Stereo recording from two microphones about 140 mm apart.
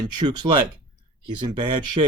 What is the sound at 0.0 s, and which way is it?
Speech, 30° right (ahead or behind).